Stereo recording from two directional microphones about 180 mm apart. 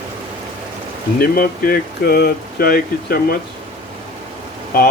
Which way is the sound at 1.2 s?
55° left (ahead or behind).